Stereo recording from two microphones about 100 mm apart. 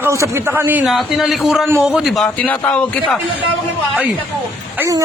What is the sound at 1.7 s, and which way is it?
Speech, 25° right (ahead or behind).